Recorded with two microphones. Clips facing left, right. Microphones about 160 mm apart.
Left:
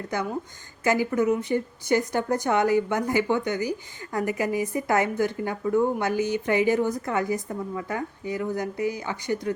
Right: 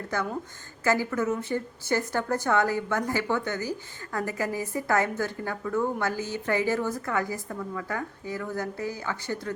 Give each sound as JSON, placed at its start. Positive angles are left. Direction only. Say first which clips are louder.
{"t": 0.9, "sound": "a woman's voice", "louder": "left 3 dB", "side_deg": 15}